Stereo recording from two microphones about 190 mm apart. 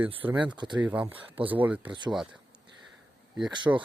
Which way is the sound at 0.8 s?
10° right (ahead or behind).